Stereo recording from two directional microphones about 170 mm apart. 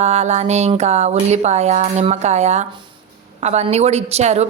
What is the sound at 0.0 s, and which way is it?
A woman's voice, 40° right (ahead or behind).